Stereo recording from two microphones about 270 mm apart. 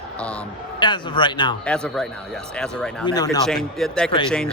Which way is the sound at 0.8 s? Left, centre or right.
Centre.